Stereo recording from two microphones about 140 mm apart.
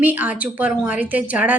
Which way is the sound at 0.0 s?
10° right (ahead or behind).